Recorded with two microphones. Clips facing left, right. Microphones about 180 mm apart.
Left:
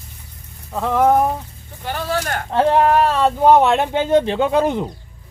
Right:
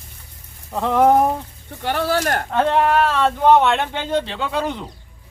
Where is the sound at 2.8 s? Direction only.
40° left (ahead or behind).